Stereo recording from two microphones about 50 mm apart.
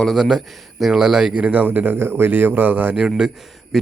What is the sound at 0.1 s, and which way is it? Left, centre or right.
Speech, centre.